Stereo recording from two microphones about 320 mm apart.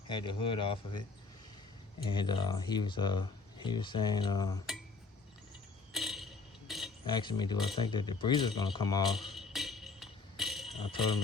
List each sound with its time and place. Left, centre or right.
0.1 s speech: centre
2.0 s speech: centre
5.9 s a sound: centre
7.0 s speech: centre
9.3 s tambourine: centre
10.8 s speech: centre